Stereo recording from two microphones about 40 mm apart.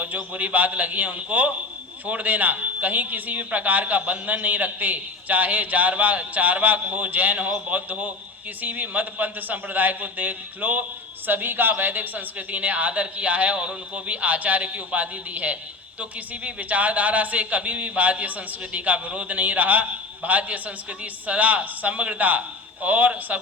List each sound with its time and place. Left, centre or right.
0.0 s a woman's voice: right
11.3 s a woman's voice: right